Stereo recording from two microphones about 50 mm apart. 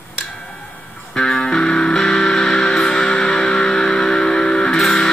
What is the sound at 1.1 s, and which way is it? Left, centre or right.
Music, centre.